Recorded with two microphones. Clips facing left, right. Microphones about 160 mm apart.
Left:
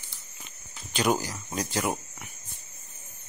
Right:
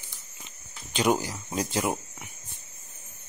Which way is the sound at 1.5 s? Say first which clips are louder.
Right 2 dB; 25° right (ahead or behind).